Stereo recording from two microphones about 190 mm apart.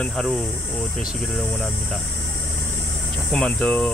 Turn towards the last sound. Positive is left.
turn(degrees=5)  # may be behind; listen again after turning